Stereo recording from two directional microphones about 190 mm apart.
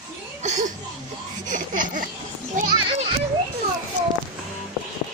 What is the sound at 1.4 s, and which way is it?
Laughter, 45° right (ahead or behind).